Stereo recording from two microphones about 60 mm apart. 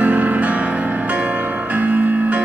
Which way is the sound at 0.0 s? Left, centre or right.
Right.